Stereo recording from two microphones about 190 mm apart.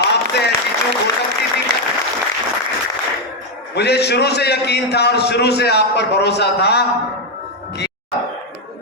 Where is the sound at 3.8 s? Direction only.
60° left (ahead or behind).